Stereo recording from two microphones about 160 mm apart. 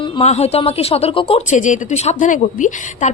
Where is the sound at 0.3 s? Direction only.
40° left (ahead or behind).